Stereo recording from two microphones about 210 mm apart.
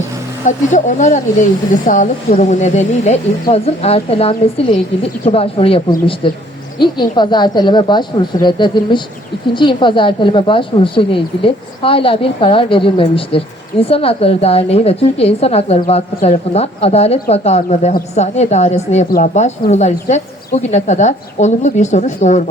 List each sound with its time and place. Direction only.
0.4 s a woman's voice: 35° left (ahead or behind)